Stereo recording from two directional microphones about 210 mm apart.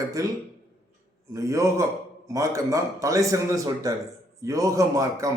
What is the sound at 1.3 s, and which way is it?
A man's voice, 15° right (ahead or behind).